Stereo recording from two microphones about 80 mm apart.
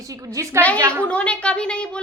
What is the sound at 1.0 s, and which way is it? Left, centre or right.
A woman's voice, centre.